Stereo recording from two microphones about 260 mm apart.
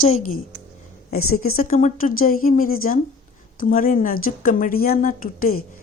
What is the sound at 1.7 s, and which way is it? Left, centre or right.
Speech, left.